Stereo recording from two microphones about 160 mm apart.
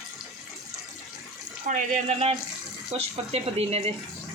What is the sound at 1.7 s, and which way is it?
Speech, 50° right (ahead or behind).